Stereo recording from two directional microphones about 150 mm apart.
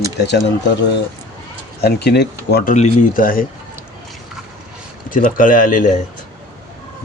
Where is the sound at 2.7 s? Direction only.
55° left (ahead or behind).